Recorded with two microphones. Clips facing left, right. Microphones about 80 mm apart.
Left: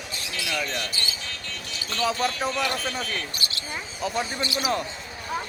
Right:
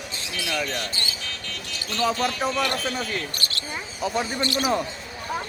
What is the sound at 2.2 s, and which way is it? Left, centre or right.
Speech, centre.